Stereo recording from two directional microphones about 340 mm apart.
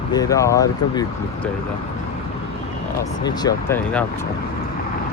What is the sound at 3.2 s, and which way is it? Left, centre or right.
Speech, centre.